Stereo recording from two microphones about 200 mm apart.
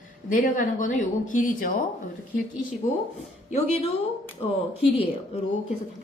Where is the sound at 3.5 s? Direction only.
35° left (ahead or behind).